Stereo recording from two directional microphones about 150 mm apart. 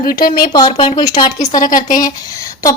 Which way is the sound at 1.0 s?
30° left (ahead or behind).